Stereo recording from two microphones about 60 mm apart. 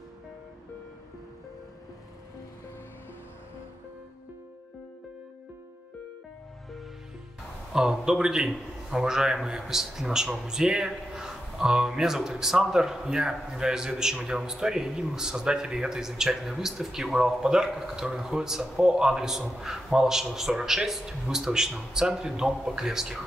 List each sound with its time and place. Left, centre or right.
7.7 s a man's voice: centre